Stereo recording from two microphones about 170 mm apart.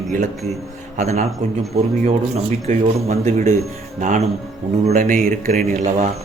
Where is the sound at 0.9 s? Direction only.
40° right (ahead or behind).